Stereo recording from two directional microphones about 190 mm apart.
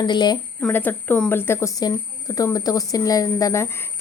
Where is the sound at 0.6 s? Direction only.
10° left (ahead or behind).